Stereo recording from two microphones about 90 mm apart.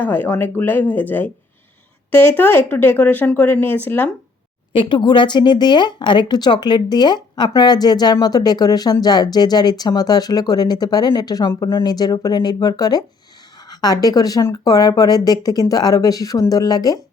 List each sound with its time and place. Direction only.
0.0 s speech: 20° left (ahead or behind)
4.7 s a woman's voice: 65° left (ahead or behind); by 17.0 s 45° left (ahead or behind)